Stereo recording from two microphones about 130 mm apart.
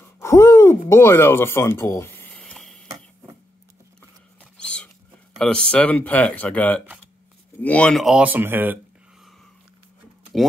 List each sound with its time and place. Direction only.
0.2 s a sound: 20° left (ahead or behind); by 2.9 s centre (ahead or behind)
4.6 s rodents: 10° left (ahead or behind)
5.4 s speech: 5° left (ahead or behind); by 8.7 s 15° right (ahead or behind)